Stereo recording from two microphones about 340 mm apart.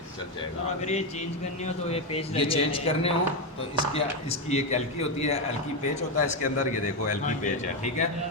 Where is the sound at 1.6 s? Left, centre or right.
Centre.